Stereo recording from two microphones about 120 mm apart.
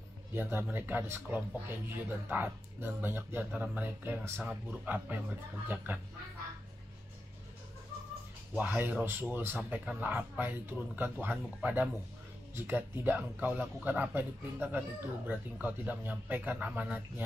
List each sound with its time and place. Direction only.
0.3 s speech: 15° right (ahead or behind)
8.5 s speech: 15° right (ahead or behind)